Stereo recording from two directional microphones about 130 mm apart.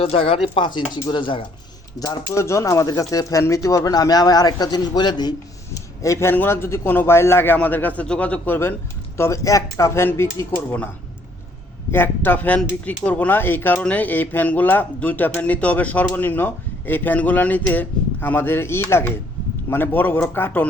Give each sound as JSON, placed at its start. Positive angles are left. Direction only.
{"t": 0.0, "sound": "speech", "side_deg": 45}
{"t": 2.0, "sound": "a man's voice", "side_deg": 25}
{"t": 11.9, "sound": "a man's voice", "side_deg": 15}